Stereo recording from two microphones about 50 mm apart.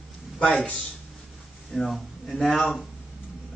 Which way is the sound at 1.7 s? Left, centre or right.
Centre.